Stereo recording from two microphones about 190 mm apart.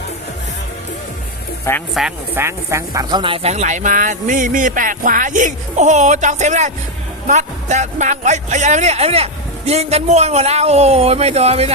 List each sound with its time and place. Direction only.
1.9 s speech: 5° right (ahead or behind); by 11.7 s 35° right (ahead or behind)